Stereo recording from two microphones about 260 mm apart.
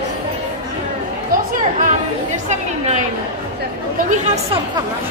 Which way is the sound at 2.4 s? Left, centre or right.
Right.